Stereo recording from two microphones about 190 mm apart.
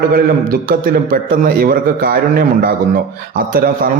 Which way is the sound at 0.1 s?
50° right (ahead or behind).